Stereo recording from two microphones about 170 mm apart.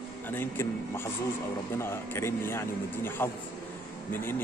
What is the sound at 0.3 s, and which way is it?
A man's voice, 15° left (ahead or behind).